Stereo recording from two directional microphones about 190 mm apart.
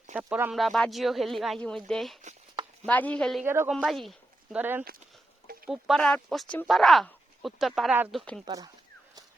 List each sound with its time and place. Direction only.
0.1 s speech: 5° right (ahead or behind)
3.4 s speech: 15° right (ahead or behind)
3.7 s speech: centre (ahead or behind)
8.2 s speech: 5° left (ahead or behind)
8.4 s speech: 20° right (ahead or behind)